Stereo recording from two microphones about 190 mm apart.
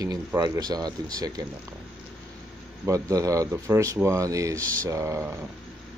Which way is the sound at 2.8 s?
15° right (ahead or behind).